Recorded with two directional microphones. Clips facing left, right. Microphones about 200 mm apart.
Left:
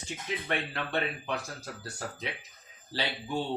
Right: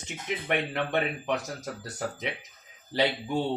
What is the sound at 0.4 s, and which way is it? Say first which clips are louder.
Speech: right 6 dB; 20° right (ahead or behind).